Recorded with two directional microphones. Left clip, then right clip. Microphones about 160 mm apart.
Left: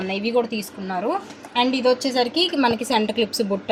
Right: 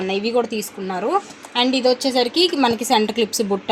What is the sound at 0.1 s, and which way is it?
A woman's voice, 45° right (ahead or behind).